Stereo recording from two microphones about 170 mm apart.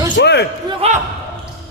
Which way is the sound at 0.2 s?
80° left.